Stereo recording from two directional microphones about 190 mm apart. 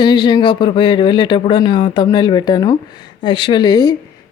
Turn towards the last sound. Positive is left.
turn(degrees=20)  # may be behind; listen again after turning